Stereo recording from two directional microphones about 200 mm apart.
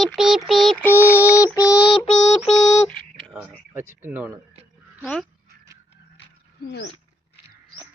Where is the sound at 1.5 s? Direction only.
20° left (ahead or behind).